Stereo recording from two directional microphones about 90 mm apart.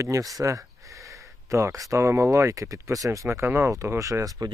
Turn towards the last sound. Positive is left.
turn(degrees=-40)  # may be behind; listen again after turning